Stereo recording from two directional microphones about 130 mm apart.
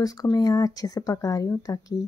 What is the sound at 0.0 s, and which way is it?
Speech, 25° left (ahead or behind).